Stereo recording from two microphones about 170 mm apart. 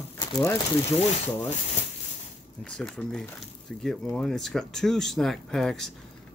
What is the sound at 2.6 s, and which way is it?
Speech, 5° left (ahead or behind).